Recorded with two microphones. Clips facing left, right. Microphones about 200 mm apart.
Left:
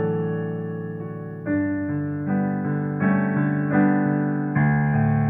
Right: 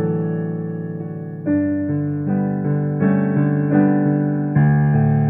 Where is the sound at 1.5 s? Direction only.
45° right (ahead or behind).